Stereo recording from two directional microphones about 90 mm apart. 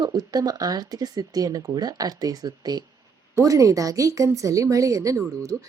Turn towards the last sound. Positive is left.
turn(degrees=-35)  # may be behind; listen again after turning